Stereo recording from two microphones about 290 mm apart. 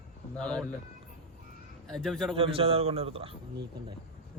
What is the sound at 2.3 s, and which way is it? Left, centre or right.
A man's voice, centre.